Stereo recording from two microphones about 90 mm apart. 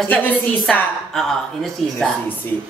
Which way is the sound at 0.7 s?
5° left (ahead or behind).